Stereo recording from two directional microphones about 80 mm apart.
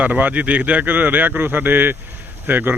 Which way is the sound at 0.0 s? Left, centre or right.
Right.